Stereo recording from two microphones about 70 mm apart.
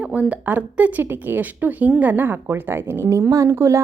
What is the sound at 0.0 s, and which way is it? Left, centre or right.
A woman's voice, centre.